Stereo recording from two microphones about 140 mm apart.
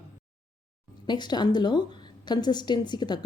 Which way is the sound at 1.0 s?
30° left (ahead or behind).